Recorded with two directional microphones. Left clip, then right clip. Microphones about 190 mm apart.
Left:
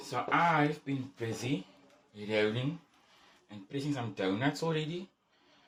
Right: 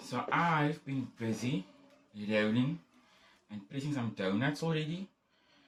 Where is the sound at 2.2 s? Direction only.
30° left (ahead or behind).